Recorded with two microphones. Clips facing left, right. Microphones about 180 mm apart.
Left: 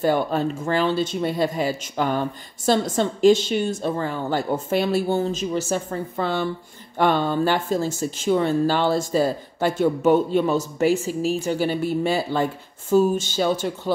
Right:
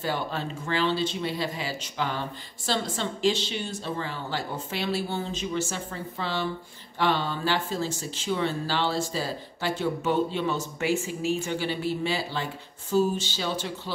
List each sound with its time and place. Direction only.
0.0 s speech: 50° left (ahead or behind)